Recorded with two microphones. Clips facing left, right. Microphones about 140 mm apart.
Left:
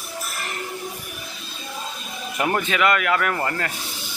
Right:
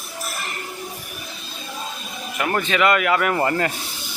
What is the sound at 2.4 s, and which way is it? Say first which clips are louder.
Speech: even; 15° left (ahead or behind).